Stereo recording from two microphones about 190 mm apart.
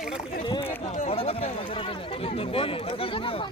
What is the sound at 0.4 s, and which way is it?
Run, 25° left (ahead or behind).